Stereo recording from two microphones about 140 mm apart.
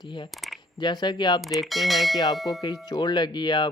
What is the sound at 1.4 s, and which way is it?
Speech, centre (ahead or behind).